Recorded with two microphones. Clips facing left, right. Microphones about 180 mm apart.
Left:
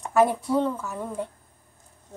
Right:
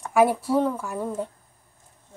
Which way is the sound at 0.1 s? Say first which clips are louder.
Right 1 dB; 10° right (ahead or behind).